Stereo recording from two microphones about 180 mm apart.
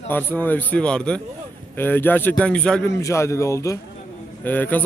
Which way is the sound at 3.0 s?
15° left (ahead or behind).